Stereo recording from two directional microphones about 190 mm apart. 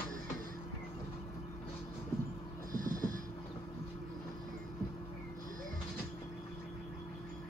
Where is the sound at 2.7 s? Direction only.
45° right (ahead or behind).